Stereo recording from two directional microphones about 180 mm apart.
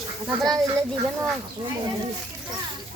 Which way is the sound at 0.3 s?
20° right (ahead or behind).